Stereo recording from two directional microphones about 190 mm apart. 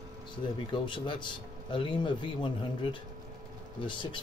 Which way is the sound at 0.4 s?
25° left (ahead or behind).